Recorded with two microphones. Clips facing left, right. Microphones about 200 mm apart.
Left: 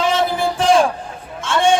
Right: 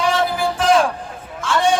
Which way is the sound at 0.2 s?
25° left (ahead or behind).